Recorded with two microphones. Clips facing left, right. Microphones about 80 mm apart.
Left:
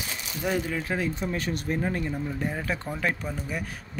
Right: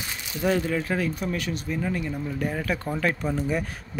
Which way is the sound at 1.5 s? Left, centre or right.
Left.